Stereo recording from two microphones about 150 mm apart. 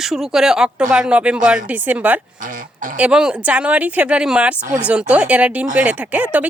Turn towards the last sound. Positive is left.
turn(degrees=-10)  # may be behind; listen again after turning